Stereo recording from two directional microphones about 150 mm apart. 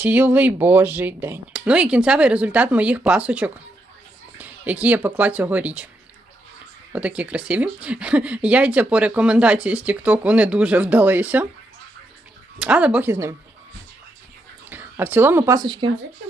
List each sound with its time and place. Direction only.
0.0 s speech: 10° right (ahead or behind)
6.9 s speech: 10° right (ahead or behind)
12.5 s speech: 5° right (ahead or behind)
14.7 s speech: 15° right (ahead or behind)
15.6 s speech: 30° right (ahead or behind)